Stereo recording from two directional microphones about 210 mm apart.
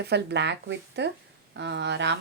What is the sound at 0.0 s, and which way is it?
A woman's voice, 50° right (ahead or behind).